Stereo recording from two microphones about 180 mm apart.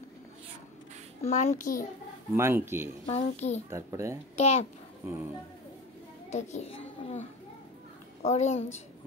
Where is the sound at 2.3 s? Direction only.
15° right (ahead or behind).